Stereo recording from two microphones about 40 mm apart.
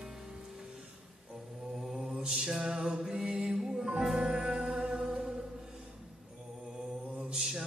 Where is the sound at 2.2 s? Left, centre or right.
Centre.